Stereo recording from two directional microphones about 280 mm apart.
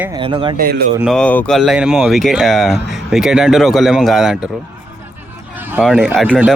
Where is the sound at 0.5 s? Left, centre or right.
Right.